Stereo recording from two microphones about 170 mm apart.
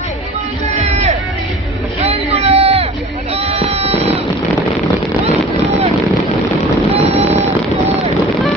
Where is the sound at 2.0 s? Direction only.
35° right (ahead or behind).